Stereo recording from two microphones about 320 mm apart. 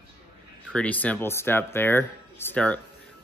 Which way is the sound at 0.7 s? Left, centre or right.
Centre.